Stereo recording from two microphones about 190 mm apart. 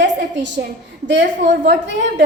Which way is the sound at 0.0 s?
65° right (ahead or behind).